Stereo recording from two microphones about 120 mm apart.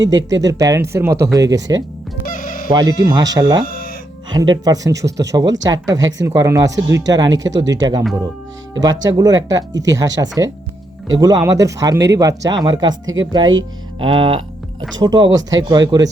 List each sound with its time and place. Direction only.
0.1 s speech: 30° right (ahead or behind)
2.2 s music: 90° left
2.7 s speech: 30° right (ahead or behind)